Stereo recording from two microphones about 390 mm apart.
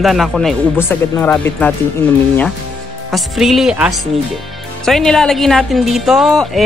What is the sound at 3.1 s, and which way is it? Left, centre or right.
Speech, centre.